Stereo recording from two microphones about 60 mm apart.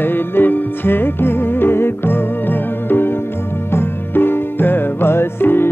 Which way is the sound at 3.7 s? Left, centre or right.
Left.